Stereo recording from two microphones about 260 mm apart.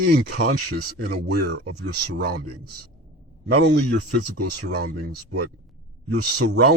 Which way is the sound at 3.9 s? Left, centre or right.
Right.